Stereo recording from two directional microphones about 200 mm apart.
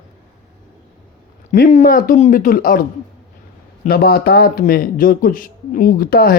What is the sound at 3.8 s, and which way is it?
Speech, 50° left (ahead or behind).